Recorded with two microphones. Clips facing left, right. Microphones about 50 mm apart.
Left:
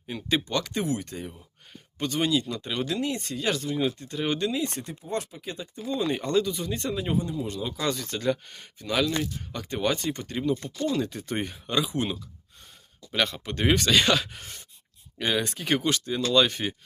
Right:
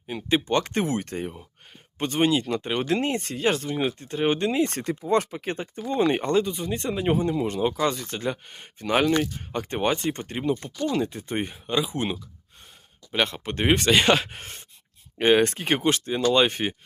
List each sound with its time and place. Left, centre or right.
0.1 s speech: right
4.7 s speech: right
6.2 s speech: right
7.1 s speech: right
7.5 s speech: right
7.8 s speech: right
8.8 s speech: right; by 12.0 s centre
13.2 s speech: right